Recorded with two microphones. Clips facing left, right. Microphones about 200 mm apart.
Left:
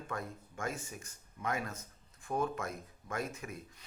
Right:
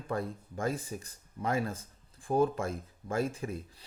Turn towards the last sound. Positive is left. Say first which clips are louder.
# right 7 dB
turn(degrees=-30)  # may be behind; listen again after turning